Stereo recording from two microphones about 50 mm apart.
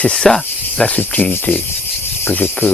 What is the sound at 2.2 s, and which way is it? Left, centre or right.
Cricket, left.